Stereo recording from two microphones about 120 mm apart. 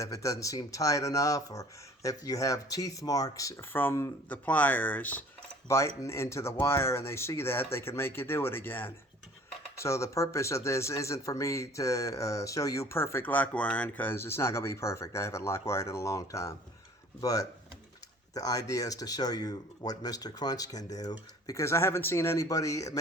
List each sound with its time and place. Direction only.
0.0 s speech: 25° left (ahead or behind)
5.6 s speech: 25° left (ahead or behind)